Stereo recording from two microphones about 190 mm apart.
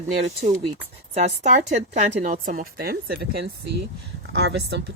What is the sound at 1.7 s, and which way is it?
Speech, 35° right (ahead or behind).